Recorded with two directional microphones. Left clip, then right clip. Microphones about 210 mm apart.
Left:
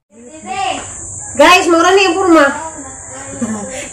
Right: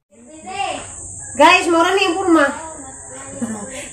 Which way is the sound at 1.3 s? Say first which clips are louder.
Left 4 dB; 15° left (ahead or behind).